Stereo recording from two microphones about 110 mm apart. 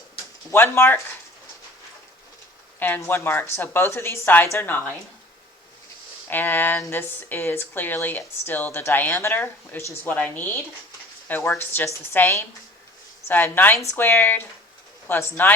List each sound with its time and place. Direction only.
0.5 s speech: 20° left (ahead or behind)
2.7 s speech: 15° left (ahead or behind)
6.2 s speech: 15° left (ahead or behind)